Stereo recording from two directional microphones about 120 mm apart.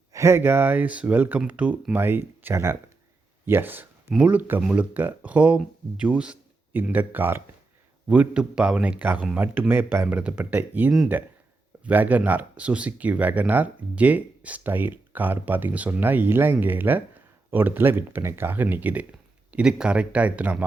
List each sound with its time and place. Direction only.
0.1 s speech: 25° right (ahead or behind)